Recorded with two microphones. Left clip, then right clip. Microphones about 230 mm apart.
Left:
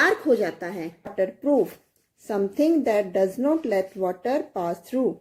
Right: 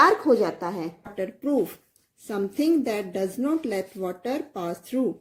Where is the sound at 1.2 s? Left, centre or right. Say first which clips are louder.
Left 4 dB; right.